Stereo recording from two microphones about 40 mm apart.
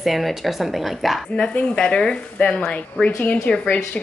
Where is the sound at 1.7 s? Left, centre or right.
Centre.